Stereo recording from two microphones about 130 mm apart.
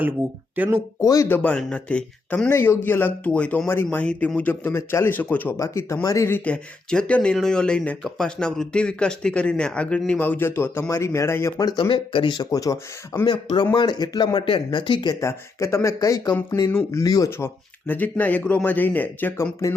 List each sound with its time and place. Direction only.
0.2 s speech: 20° right (ahead or behind)
1.0 s speech: 25° left (ahead or behind)
1.3 s speech: 10° left (ahead or behind)
11.8 s speech: 40° left (ahead or behind); by 13.2 s 25° left (ahead or behind)
13.2 s speech: 35° left (ahead or behind)
15.2 s speech: 20° left (ahead or behind)